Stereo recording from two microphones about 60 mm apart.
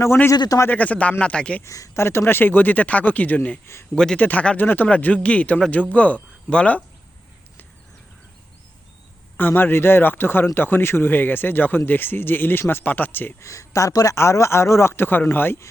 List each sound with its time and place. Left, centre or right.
0.7 s speech: left
1.6 s speech: left
2.0 s speech: left
3.9 s speech: centre
4.2 s speech: left
9.4 s speech: left
13.4 s speech: left
14.2 s speech: left